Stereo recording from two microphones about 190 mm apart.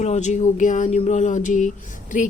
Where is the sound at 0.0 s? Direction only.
35° left (ahead or behind).